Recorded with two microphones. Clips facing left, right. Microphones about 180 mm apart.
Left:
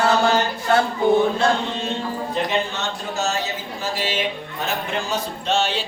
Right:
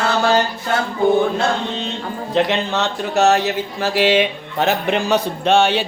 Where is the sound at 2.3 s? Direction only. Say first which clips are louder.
Right 7 dB; 80° right.